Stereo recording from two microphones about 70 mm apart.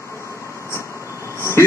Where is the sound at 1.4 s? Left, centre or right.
Left.